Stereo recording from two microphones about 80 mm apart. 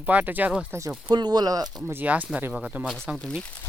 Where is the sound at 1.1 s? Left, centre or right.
Right.